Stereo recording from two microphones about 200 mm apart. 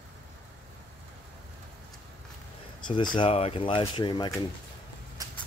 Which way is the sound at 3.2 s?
30° left (ahead or behind).